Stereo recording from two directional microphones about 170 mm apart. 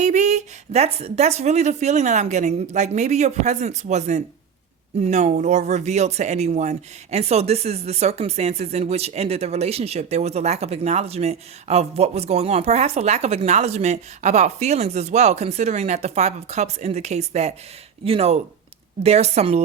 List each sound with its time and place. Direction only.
0.0 s a woman's voice: 45° right (ahead or behind)